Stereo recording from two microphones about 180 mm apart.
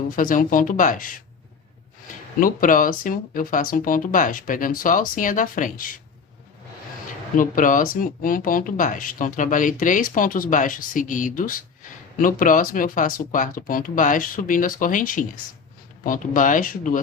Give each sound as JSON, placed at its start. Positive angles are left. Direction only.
{"t": 0.2, "sound": "speech", "side_deg": 50}
{"t": 7.3, "sound": "speech", "side_deg": 50}